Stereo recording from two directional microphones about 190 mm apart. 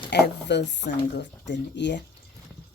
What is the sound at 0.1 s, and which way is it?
Speech, 65° left (ahead or behind).